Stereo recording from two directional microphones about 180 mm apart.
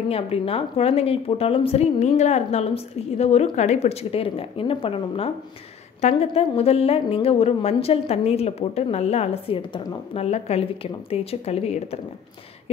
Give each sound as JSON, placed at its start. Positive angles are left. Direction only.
{"t": 0.1, "sound": "a woman's voice", "side_deg": 30}